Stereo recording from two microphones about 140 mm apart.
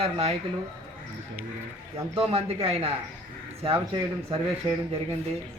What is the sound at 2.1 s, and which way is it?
Speech, 45° right (ahead or behind).